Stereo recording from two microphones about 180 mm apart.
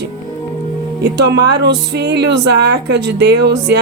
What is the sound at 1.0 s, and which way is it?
Speech, 65° right (ahead or behind).